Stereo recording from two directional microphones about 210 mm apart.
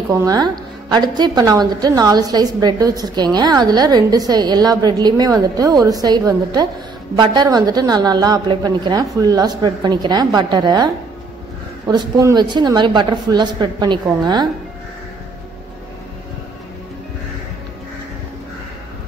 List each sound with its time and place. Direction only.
0.2 s a woman's voice: 20° right (ahead or behind)
11.9 s a woman's voice: 15° right (ahead or behind)